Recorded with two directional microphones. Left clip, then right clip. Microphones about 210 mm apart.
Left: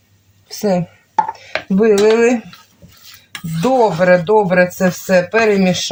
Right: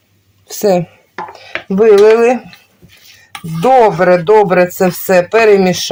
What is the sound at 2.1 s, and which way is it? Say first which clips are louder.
Speech: right 3 dB; 40° right (ahead or behind).